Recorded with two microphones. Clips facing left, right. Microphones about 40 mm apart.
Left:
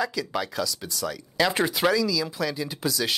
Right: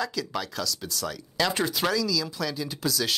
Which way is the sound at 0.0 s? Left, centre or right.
Centre.